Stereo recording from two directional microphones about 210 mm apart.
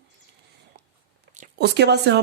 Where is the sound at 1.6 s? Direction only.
55° right (ahead or behind).